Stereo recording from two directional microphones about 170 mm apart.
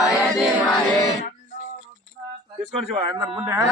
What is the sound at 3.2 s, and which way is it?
Speech, 10° right (ahead or behind).